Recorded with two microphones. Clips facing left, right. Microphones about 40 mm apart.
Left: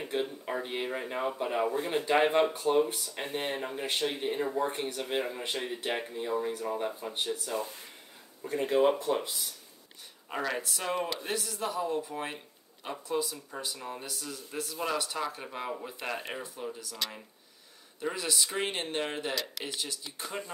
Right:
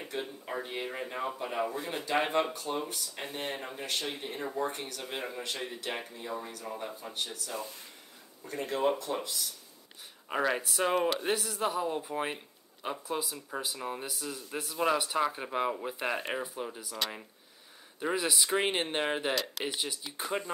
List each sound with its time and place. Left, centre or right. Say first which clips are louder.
0.2 s speech: left 4 dB; centre
2.5 s speech: left 8 dB; left
3.4 s speech: left 3 dB; centre
3.8 s speech: left 5 dB; left
4.4 s speech: left 1 dB; centre
10.3 s speech: right 3 dB; centre
18.0 s speech: right 2 dB; centre